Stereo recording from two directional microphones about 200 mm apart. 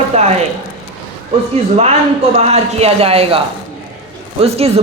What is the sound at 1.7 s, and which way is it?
Speech, 30° right (ahead or behind).